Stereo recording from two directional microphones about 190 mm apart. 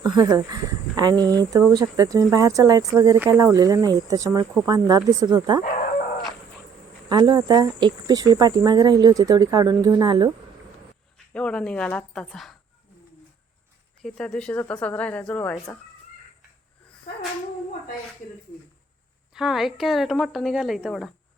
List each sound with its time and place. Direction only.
0.0 s speech: 20° right (ahead or behind)
7.1 s speech: 20° right (ahead or behind)
11.3 s a woman's voice: 5° left (ahead or behind)
14.0 s a woman's voice: 5° left (ahead or behind)
19.3 s a woman's voice: 5° right (ahead or behind)